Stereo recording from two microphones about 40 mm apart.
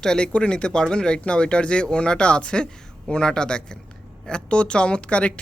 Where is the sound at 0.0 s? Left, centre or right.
Centre.